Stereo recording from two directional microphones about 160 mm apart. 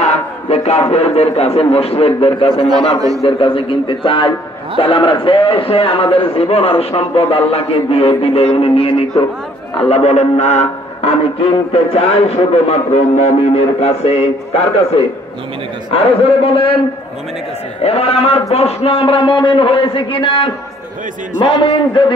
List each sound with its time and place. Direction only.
0.0 s a sound: 40° left (ahead or behind)
0.9 s speech: 40° left (ahead or behind)
17.8 s speech: 40° left (ahead or behind)